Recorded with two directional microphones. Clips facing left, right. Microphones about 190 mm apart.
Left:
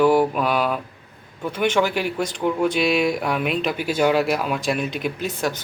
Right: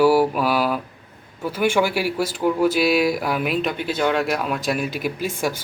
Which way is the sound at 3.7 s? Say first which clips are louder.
Left 2 dB; 10° left (ahead or behind).